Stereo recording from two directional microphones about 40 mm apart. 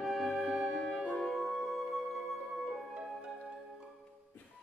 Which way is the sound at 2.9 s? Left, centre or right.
Right.